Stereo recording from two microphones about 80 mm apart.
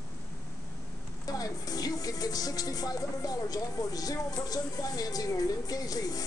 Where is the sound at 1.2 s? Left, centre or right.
Left.